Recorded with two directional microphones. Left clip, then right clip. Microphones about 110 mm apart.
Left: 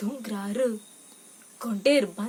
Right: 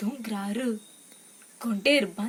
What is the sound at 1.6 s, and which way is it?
Speech, 35° left (ahead or behind).